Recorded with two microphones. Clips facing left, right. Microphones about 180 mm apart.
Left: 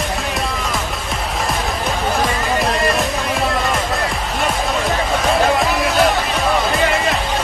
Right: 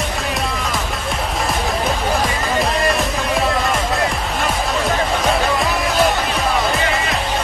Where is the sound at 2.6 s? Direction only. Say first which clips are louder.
Right 1 dB; centre (ahead or behind).